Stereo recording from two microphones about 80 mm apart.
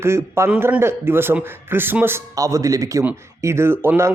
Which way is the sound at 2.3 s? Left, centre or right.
Right.